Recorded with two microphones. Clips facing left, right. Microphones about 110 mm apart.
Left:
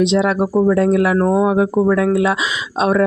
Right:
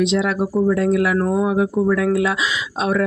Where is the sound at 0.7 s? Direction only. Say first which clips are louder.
Left 3 dB; 40° left (ahead or behind).